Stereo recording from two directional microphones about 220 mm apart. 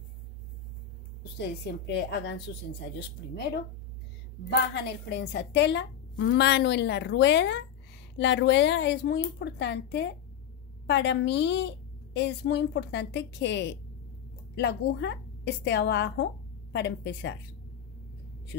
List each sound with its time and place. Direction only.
1.9 s a woman's voice: 50° left (ahead or behind)
4.5 s a woman's voice: 50° left (ahead or behind)